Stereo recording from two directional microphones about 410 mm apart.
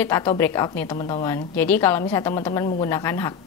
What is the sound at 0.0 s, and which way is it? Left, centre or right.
A woman's voice, centre.